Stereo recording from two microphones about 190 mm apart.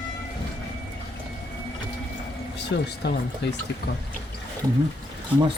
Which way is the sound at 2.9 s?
60° left (ahead or behind).